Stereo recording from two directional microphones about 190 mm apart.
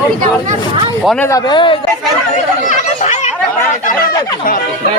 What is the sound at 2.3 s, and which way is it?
Chatter, 40° left (ahead or behind).